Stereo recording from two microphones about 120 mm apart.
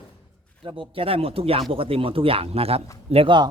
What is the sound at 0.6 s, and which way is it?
A man's voice, 40° right (ahead or behind).